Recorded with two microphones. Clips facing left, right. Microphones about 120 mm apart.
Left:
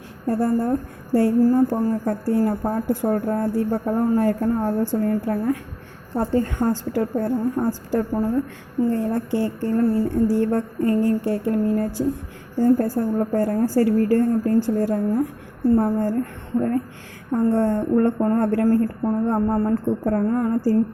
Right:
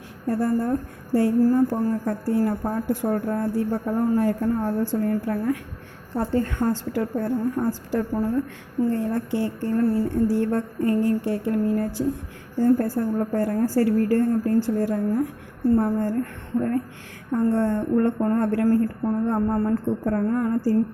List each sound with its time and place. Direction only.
0.3 s a woman's voice: 30° left (ahead or behind)